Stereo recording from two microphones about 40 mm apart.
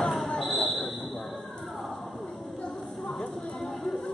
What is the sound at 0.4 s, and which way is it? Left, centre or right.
Basketball bounce, centre.